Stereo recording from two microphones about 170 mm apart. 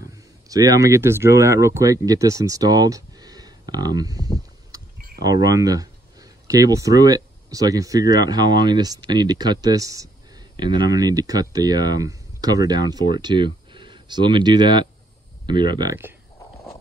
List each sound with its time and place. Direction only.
0.5 s speech: 20° right (ahead or behind)
5.2 s speech: 20° right (ahead or behind)